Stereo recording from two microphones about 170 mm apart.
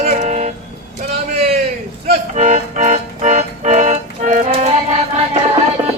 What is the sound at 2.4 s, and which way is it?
Music, 45° right (ahead or behind).